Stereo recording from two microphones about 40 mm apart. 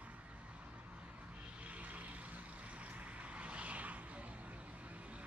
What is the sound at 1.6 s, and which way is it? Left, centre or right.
Vehicle, right.